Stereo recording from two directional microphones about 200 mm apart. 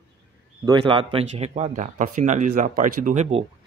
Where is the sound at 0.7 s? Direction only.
25° right (ahead or behind).